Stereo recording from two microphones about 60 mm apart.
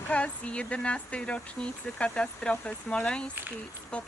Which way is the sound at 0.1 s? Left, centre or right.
Centre.